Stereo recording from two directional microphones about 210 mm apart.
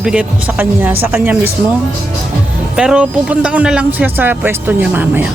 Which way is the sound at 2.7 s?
5° right (ahead or behind).